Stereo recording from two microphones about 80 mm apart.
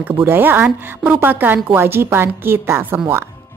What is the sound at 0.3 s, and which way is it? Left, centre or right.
A woman's voice, right.